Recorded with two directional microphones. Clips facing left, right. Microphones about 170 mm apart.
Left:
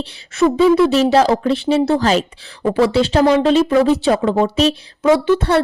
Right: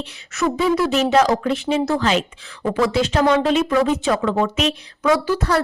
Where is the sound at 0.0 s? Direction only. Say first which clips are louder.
Left 6 dB; 30° left (ahead or behind).